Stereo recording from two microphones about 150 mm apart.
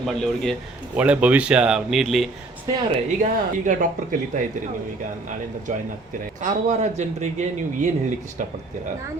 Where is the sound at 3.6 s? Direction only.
60° right (ahead or behind).